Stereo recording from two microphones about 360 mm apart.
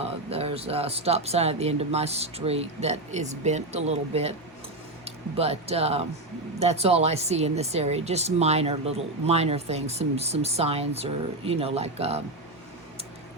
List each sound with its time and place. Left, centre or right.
0.0 s speech: centre